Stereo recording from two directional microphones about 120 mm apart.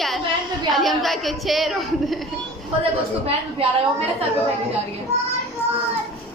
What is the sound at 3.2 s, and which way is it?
Speech, 60° right (ahead or behind).